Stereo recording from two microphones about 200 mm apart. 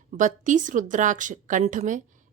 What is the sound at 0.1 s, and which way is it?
Speech, 40° right (ahead or behind).